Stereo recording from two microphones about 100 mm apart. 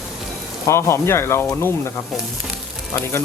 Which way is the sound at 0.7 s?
25° left (ahead or behind).